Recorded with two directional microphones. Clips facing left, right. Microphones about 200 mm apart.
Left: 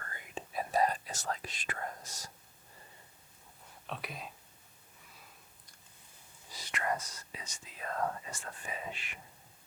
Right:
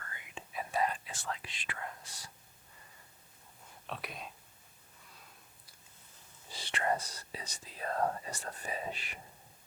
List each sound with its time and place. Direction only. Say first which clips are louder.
0.0 s whispering: left 4 dB; 40° left (ahead or behind)
3.8 s speech: left 1 dB; centre (ahead or behind)
6.5 s speech: right 2 dB; 30° right (ahead or behind)